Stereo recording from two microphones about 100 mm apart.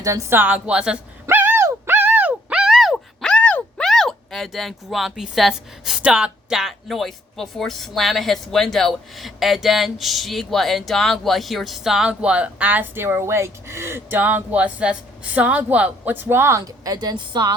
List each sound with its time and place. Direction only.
0.0 s speech: 30° right (ahead or behind)
0.3 s speech: 15° right (ahead or behind); by 17.5 s 45° right (ahead or behind)